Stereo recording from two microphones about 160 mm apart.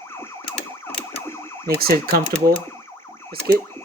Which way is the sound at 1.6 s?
70° right (ahead or behind).